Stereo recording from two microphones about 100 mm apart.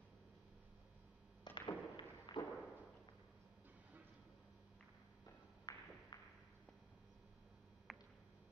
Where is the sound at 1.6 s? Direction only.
50° left (ahead or behind).